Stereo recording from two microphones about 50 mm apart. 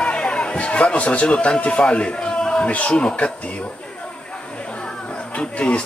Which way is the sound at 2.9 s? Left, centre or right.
Centre.